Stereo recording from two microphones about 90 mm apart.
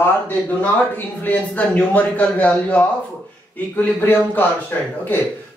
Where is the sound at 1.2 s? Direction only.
20° left (ahead or behind).